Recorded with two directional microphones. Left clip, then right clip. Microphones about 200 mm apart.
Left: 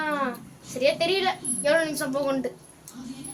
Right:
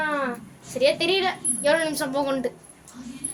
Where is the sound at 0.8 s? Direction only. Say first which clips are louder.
Right 2 dB; 40° right (ahead or behind).